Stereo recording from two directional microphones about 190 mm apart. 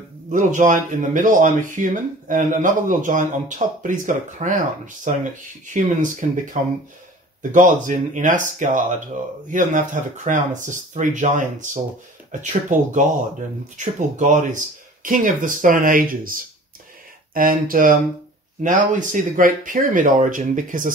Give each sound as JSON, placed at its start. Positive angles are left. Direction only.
{"t": 0.3, "sound": "speech", "side_deg": -40}